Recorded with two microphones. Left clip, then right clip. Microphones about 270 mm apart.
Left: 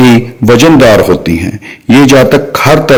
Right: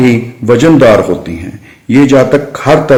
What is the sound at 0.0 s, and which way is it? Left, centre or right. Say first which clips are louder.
A man's voice: left 4 dB; left.